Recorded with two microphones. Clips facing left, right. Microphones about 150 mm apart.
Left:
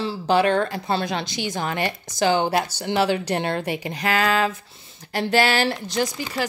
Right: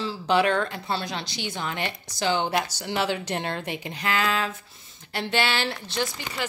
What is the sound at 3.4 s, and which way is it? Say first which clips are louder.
Speech: left 5 dB; 65° left (ahead or behind).